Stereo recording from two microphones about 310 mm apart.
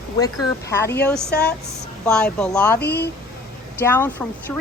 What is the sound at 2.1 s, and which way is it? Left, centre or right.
Speech, centre.